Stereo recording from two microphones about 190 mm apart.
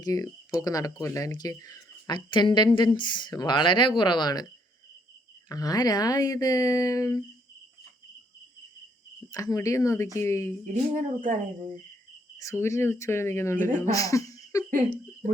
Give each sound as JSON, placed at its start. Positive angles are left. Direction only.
{"t": 0.0, "sound": "speech", "side_deg": 15}
{"t": 5.5, "sound": "speech", "side_deg": 20}
{"t": 9.3, "sound": "speech", "side_deg": 15}
{"t": 10.9, "sound": "speech", "side_deg": -45}
{"t": 12.4, "sound": "speech", "side_deg": 15}